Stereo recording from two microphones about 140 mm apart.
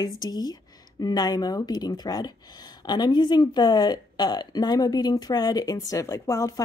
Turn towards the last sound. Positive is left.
turn(degrees=20)  # may be behind; listen again after turning